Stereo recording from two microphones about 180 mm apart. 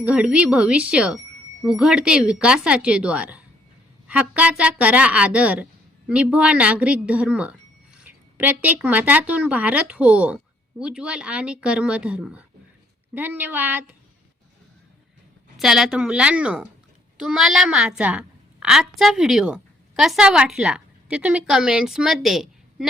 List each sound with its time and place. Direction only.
0.0 s speech: 5° right (ahead or behind)
15.5 s a woman's voice: centre (ahead or behind)